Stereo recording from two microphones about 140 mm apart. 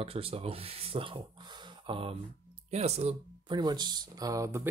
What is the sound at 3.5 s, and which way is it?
Speech, 30° right (ahead or behind).